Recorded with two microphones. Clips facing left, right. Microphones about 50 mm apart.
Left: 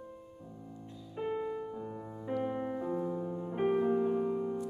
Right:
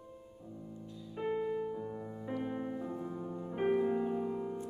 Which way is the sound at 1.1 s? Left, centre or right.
Centre.